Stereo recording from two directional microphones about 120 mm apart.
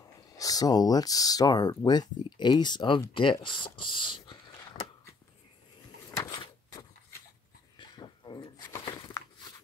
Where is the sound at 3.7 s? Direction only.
40° left (ahead or behind).